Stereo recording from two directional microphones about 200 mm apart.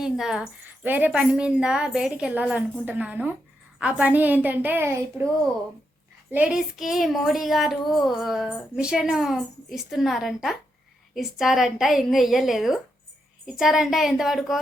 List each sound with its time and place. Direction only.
0.0 s a woman's voice: 5° right (ahead or behind)
6.3 s a woman's voice: 5° right (ahead or behind)